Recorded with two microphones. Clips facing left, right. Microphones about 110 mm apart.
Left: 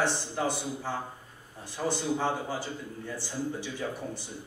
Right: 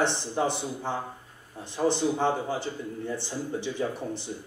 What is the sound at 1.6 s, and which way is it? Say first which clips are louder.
A man's voice: right 5 dB; 20° right (ahead or behind).